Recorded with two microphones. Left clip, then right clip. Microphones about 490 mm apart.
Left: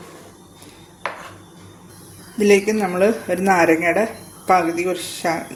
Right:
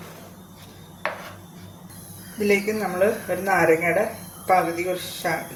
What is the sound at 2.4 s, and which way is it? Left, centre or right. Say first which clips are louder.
Speech: left 6 dB; centre.